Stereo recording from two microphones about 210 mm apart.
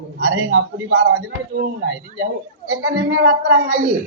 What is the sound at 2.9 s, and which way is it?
A man's voice, 50° right (ahead or behind).